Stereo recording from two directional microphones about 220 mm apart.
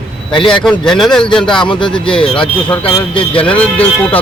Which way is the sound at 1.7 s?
20° left (ahead or behind).